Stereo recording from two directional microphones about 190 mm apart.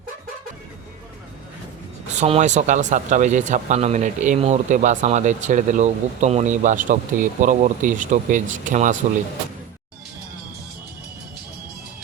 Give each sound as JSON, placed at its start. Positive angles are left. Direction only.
{"t": 2.1, "sound": "speech", "side_deg": -35}